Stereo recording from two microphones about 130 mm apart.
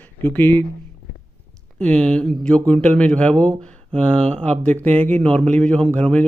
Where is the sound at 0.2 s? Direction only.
15° left (ahead or behind).